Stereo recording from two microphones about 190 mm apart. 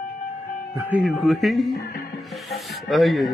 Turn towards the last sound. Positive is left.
turn(degrees=0)  # may be behind; listen again after turning